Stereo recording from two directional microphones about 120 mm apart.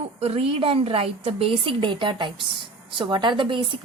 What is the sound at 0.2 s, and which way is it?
Speech, 55° right (ahead or behind).